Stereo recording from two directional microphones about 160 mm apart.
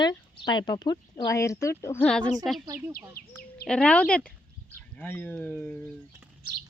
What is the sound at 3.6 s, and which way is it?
Speech, 5° left (ahead or behind).